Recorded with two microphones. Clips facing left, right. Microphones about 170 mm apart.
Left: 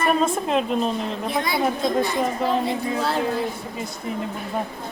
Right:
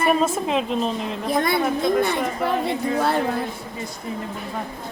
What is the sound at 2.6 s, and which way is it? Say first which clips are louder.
Speech: right 2 dB; 55° right (ahead or behind).